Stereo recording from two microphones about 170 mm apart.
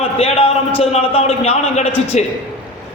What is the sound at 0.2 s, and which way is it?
A man's voice, 35° left (ahead or behind).